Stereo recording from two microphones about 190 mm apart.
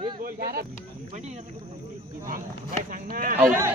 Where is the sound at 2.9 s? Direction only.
45° right (ahead or behind).